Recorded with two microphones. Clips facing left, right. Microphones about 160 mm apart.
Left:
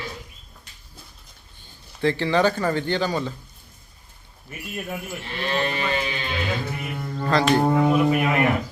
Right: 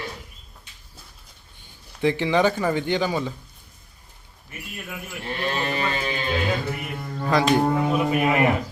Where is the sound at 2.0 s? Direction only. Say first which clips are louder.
Even; 15° right (ahead or behind).